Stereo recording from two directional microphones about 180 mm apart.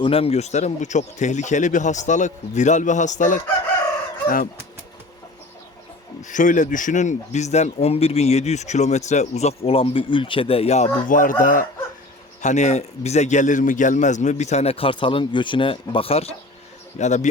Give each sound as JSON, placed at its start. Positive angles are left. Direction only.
{"t": 0.0, "sound": "a man's voice", "side_deg": 30}
{"t": 6.2, "sound": "a man's voice", "side_deg": 45}